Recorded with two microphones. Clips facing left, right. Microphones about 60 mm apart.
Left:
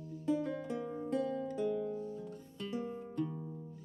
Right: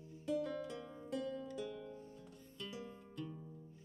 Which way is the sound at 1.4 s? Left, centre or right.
Left.